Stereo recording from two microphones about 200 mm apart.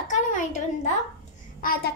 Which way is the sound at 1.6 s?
45° left (ahead or behind).